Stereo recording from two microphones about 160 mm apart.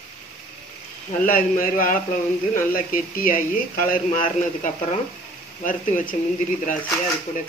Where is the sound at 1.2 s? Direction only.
60° left (ahead or behind).